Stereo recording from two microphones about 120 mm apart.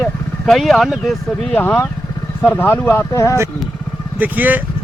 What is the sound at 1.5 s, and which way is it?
Speech, 15° left (ahead or behind).